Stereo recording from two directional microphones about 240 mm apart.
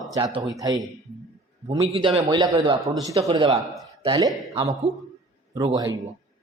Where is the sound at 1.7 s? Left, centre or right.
Right.